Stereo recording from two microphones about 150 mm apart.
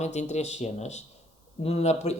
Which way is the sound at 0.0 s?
50° left (ahead or behind).